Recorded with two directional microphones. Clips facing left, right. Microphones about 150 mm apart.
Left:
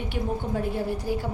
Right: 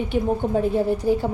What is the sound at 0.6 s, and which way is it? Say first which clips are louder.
Speech: right 7 dB; 20° right (ahead or behind).